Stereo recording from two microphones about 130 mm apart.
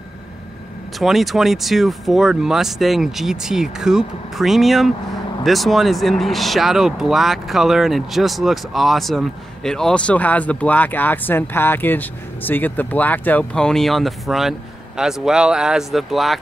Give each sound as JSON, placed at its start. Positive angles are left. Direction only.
{"t": 0.9, "sound": "speech", "side_deg": 0}